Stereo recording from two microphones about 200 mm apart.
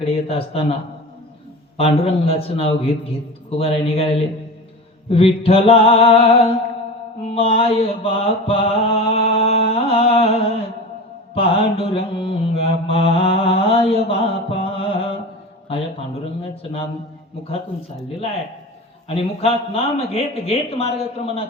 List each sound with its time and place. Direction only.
0.0 s speech: 30° left (ahead or behind)
1.8 s speech: 30° left (ahead or behind)
7.3 s mantra: 30° left (ahead or behind)
15.7 s speech: 30° left (ahead or behind)
19.0 s speech: 30° left (ahead or behind)